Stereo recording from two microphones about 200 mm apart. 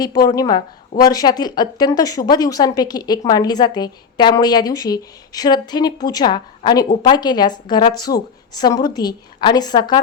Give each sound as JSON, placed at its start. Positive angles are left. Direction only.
{"t": 0.0, "sound": "a woman's voice", "side_deg": 20}